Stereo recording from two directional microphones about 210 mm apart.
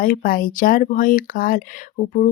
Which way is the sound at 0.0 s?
40° left (ahead or behind).